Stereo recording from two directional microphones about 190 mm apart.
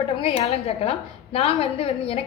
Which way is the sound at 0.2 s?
30° left (ahead or behind).